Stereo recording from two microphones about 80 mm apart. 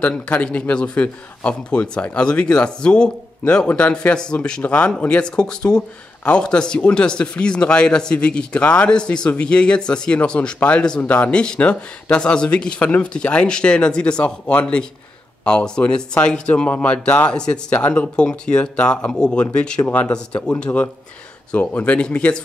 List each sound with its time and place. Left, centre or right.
0.0 s a man's voice: centre